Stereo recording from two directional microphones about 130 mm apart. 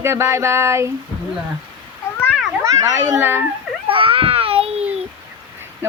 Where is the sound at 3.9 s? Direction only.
45° right (ahead or behind).